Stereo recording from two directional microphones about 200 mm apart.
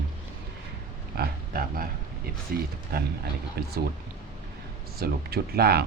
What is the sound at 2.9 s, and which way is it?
Speech, 50° right (ahead or behind).